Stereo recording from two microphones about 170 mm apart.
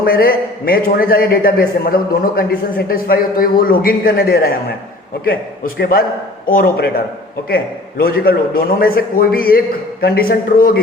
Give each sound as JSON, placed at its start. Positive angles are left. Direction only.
{"t": 0.0, "sound": "a man's voice", "side_deg": 60}